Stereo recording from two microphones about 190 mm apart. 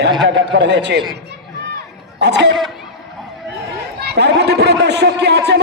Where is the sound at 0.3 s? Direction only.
65° right (ahead or behind).